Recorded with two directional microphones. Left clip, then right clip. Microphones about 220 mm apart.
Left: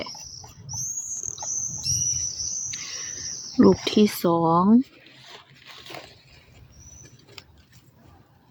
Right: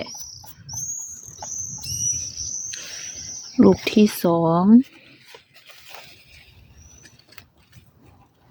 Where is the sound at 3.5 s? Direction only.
10° right (ahead or behind).